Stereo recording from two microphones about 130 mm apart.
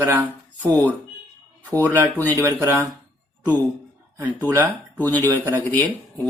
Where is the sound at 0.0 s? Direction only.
20° right (ahead or behind).